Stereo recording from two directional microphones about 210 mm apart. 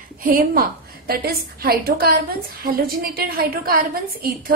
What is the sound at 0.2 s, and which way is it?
A woman's voice, 45° right (ahead or behind).